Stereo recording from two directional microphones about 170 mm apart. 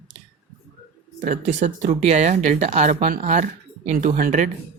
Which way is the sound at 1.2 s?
45° right (ahead or behind).